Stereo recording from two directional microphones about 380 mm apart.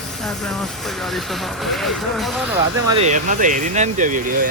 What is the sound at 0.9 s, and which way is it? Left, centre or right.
Speech, centre.